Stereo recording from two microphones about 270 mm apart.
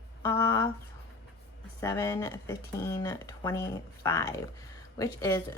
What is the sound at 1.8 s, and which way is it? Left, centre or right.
Speech, centre.